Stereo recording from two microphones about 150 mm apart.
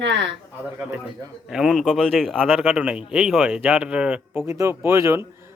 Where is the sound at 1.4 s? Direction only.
5° right (ahead or behind).